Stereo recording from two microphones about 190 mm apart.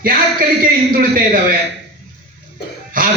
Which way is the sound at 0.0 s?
50° right (ahead or behind).